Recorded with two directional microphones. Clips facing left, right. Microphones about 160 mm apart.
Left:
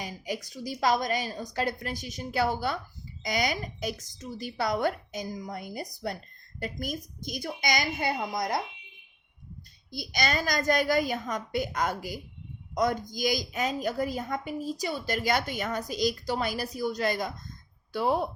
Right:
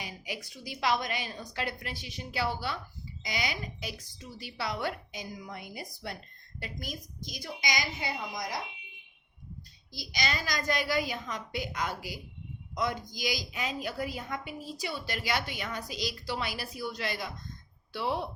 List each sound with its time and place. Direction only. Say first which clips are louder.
0.0 s a woman's voice: left 6 dB; 40° left (ahead or behind)
9.9 s a woman's voice: left 5 dB; 50° left (ahead or behind)